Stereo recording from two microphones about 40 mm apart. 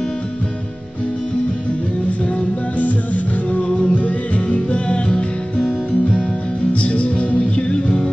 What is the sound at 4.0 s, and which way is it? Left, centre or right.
Music, left.